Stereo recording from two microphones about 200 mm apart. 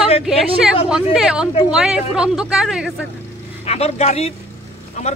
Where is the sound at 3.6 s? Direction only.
30° left (ahead or behind).